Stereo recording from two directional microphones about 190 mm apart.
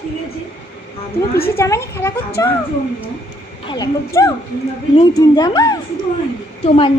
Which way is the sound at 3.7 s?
20° left (ahead or behind).